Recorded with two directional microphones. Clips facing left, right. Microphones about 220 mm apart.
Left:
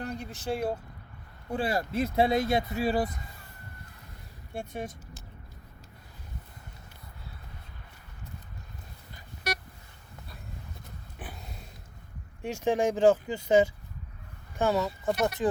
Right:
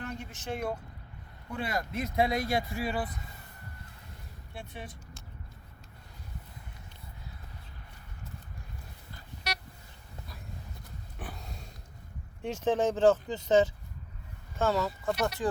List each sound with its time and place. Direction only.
0.0 s speech: 35° left (ahead or behind)
4.5 s speech: 45° left (ahead or behind)
9.5 s vehicle: 50° left (ahead or behind)
11.2 s a sound: centre (ahead or behind)
12.4 s speech: 10° left (ahead or behind)